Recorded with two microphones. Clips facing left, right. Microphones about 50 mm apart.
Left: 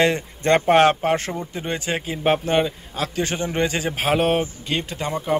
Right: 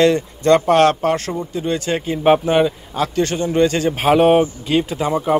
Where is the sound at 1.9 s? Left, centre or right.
Centre.